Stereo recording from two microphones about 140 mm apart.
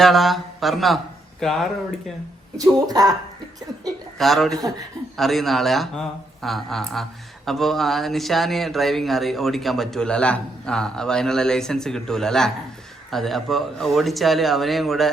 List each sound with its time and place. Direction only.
0.0 s speech: centre (ahead or behind)
2.6 s speech: 25° right (ahead or behind)
3.8 s speech: centre (ahead or behind)